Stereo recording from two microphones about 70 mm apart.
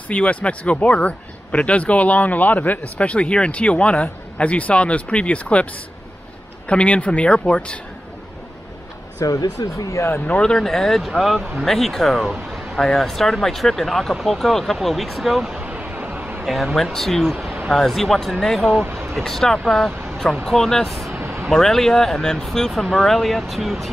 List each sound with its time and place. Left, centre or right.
0.1 s speech: centre
6.7 s speech: centre
9.2 s speech: left
10.4 s speech: centre
15.6 s a sound: centre
16.4 s speech: centre
21.2 s a sound: right
21.5 s speech: centre